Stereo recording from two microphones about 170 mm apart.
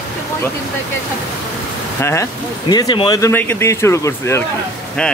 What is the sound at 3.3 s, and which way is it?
Speech, 15° left (ahead or behind).